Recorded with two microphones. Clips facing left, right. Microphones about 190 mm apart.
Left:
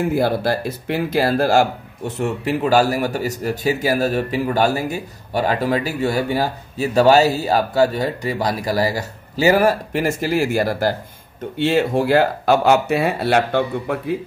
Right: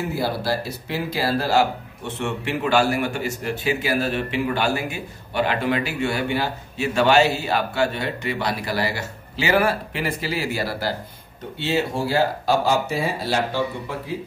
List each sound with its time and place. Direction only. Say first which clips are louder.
0.0 s speech: left 6 dB; 50° left (ahead or behind)